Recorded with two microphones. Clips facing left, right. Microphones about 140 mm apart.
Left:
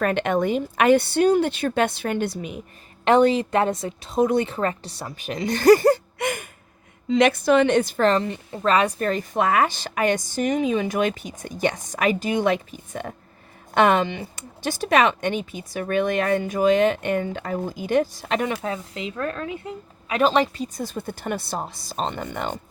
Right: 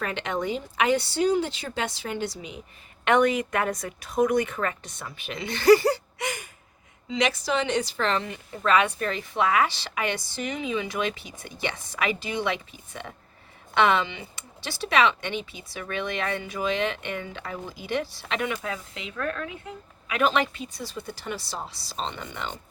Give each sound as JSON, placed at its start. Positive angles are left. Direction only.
{"t": 0.0, "sound": "a woman's voice", "side_deg": 55}
{"t": 3.0, "sound": "a woman's voice", "side_deg": 30}